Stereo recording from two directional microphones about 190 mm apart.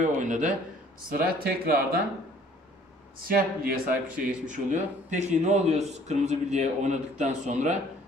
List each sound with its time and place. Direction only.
0.0 s a man's voice: 40° right (ahead or behind)
3.2 s a man's voice: 50° right (ahead or behind)